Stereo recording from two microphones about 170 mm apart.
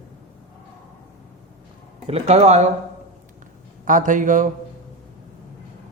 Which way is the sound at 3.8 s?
50° right (ahead or behind).